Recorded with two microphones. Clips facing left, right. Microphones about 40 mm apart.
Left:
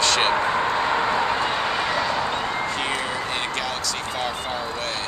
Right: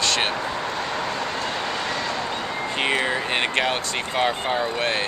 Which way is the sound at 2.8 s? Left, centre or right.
Right.